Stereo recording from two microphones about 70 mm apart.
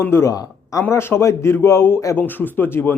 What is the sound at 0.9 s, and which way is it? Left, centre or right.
A man's voice, left.